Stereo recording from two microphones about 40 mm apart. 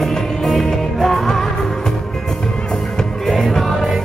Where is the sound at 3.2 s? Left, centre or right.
Centre.